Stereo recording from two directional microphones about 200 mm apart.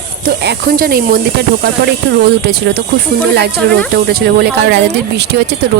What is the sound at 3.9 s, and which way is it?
Speech, 55° right (ahead or behind).